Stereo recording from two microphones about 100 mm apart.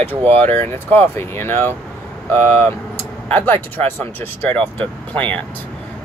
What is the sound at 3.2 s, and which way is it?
Speech, 20° left (ahead or behind).